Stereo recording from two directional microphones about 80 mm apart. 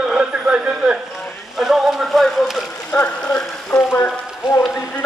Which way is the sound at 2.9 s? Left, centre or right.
Centre.